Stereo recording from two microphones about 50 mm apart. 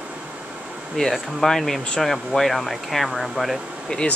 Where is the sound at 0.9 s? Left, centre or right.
Centre.